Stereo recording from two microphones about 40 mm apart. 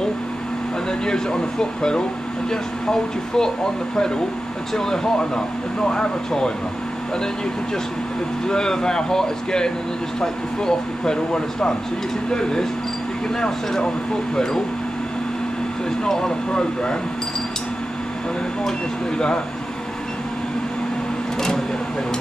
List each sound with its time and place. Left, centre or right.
1.0 s speech: centre
8.5 s speech: centre
14.3 s speech: centre
16.0 s speech: centre
19.1 s speech: left
21.4 s a sound: centre